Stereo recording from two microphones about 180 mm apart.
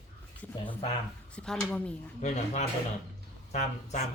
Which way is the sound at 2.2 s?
40° left (ahead or behind).